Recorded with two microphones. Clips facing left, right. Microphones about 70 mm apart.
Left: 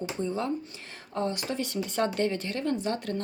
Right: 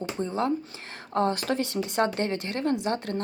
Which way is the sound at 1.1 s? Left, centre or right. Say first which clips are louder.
Right 5 dB; right.